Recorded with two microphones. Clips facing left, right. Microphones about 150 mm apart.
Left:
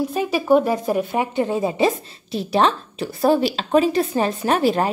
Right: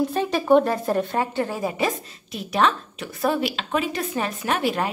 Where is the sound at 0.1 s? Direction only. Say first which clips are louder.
Left 2 dB; 10° left (ahead or behind).